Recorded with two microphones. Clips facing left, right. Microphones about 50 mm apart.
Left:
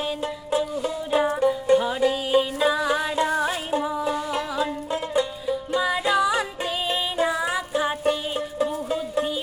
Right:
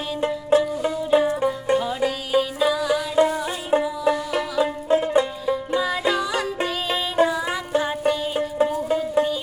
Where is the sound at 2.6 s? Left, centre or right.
Left.